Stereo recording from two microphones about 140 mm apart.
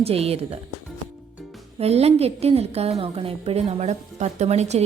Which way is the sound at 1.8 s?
45° right (ahead or behind).